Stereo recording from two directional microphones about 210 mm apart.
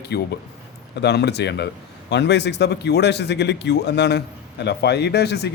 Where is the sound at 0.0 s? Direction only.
50° left (ahead or behind).